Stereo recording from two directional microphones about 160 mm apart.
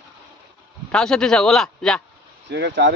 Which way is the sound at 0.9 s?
5° left (ahead or behind).